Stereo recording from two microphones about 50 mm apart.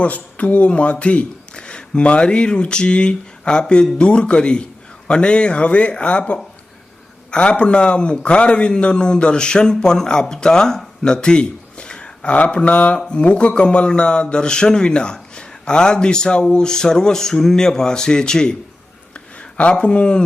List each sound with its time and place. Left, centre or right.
0.0 s a man's voice: left
19.5 s a man's voice: left